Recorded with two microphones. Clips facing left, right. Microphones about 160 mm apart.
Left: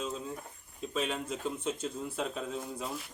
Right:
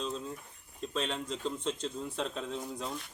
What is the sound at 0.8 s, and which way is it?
Speech, 5° left (ahead or behind).